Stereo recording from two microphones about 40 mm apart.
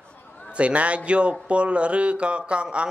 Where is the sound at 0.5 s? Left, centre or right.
Right.